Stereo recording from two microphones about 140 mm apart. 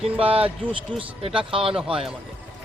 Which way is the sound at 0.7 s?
40° right (ahead or behind).